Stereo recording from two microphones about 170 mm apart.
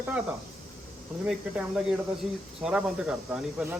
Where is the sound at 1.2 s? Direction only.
5° right (ahead or behind).